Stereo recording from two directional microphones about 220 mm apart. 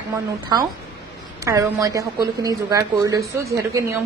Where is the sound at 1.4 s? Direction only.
15° right (ahead or behind).